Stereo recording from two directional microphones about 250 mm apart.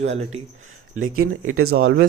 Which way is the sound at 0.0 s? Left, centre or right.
Right.